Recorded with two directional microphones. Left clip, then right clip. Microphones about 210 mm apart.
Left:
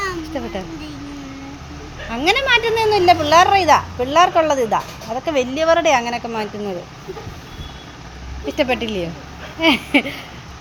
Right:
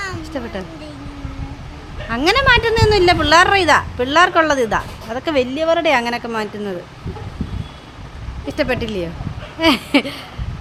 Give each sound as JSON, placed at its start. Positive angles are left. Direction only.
{"t": 0.0, "sound": "a sound", "side_deg": -20}
{"t": 2.0, "sound": "speech", "side_deg": -20}
{"t": 8.4, "sound": "speech", "side_deg": -15}